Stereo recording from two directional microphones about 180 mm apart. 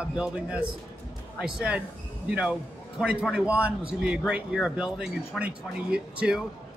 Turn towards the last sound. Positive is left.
turn(degrees=-5)  # may be behind; listen again after turning